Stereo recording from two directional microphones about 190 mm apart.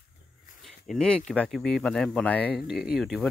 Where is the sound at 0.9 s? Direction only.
5° left (ahead or behind).